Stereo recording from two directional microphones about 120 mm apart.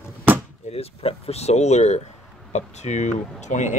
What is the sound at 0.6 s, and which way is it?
Speech, 55° left (ahead or behind).